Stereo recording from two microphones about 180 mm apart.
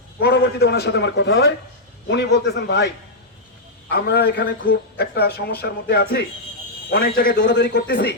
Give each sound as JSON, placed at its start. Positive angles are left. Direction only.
{"t": 0.2, "sound": "a man's voice", "side_deg": 65}